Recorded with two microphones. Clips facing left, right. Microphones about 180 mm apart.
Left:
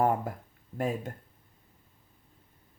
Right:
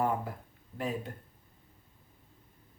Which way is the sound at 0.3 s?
45° left (ahead or behind).